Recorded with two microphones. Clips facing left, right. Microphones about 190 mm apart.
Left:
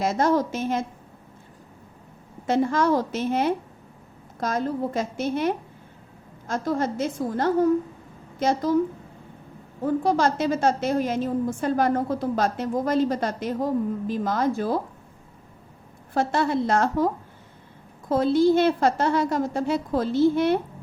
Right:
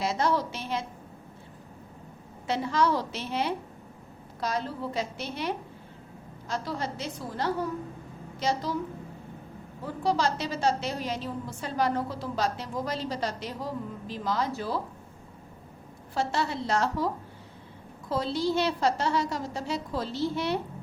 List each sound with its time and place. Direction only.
0.0 s a woman's voice: 50° left (ahead or behind)
2.5 s a woman's voice: 50° left (ahead or behind)
9.8 s a woman's voice: 50° left (ahead or behind)
16.1 s a woman's voice: 50° left (ahead or behind)
18.1 s a woman's voice: 50° left (ahead or behind)